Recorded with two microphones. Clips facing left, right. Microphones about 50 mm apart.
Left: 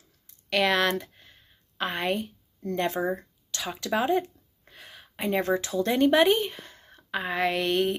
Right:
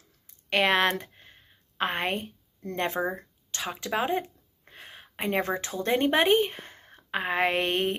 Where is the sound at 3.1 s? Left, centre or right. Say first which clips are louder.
Left 5 dB; right.